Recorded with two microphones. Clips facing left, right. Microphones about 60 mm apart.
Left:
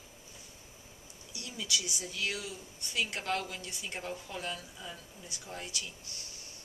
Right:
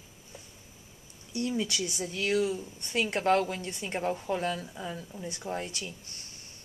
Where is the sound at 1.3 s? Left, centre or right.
Right.